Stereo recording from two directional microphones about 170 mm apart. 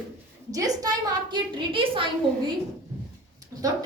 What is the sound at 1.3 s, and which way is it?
Speech, 30° right (ahead or behind).